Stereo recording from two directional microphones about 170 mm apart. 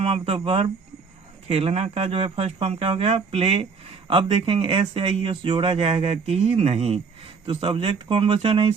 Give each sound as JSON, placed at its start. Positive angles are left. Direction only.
{"t": 0.0, "sound": "speech", "side_deg": -35}